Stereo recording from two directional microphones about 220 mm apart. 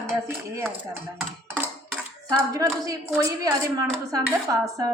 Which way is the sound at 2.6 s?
15° right (ahead or behind).